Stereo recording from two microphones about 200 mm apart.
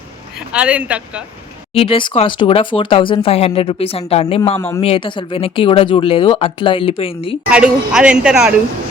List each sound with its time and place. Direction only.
0.5 s speech: 5° right (ahead or behind)
1.7 s speech: 30° left (ahead or behind)
7.5 s a woman's voice: 5° right (ahead or behind)